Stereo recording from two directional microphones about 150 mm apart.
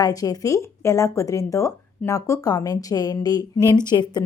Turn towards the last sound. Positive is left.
turn(degrees=30)  # may be behind; listen again after turning